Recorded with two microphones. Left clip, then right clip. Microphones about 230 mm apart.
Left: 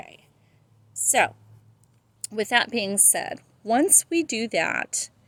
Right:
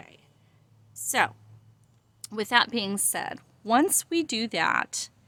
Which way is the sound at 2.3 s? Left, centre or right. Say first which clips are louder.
Left 1 dB; centre.